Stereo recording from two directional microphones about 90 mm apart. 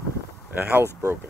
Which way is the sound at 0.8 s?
30° right (ahead or behind).